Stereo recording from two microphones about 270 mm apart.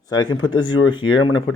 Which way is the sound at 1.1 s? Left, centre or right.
Left.